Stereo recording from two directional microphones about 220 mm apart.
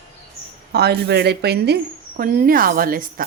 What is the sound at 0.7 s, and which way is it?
A woman's voice, 50° right (ahead or behind).